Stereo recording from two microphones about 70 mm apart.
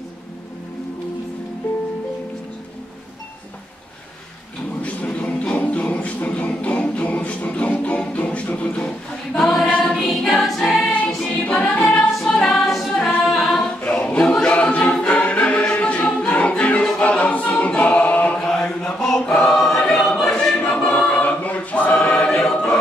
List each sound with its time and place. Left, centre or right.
1.6 s music: left
4.8 s music: centre
10.0 s music: centre
11.1 s choir: centre
11.4 s music: centre
13.5 s choir: centre